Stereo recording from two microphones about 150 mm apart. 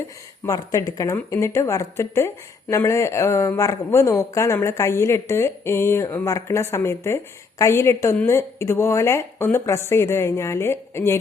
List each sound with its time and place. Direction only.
0.4 s a woman's voice: 20° left (ahead or behind)